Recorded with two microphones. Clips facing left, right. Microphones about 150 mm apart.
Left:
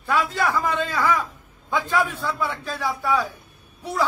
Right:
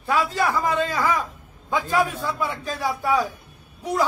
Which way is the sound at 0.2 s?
35° right (ahead or behind).